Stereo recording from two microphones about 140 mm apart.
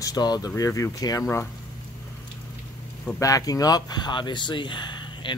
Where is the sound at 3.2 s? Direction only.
25° left (ahead or behind).